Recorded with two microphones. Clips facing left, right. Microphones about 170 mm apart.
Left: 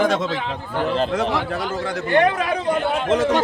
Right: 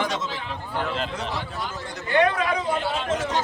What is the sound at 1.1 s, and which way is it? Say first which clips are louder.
Speech: left 9 dB; 90° left.